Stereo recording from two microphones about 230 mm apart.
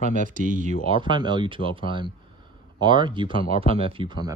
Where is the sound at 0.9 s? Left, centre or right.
Right.